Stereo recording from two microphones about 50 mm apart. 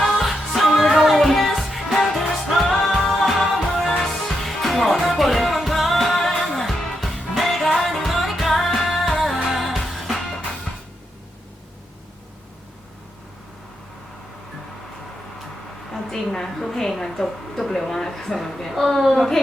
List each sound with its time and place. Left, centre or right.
0.0 s music: centre
4.4 s music: centre
6.7 s music: centre
15.9 s a sound: centre